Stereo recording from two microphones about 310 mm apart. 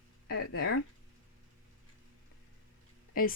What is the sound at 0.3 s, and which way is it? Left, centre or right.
Speech, left.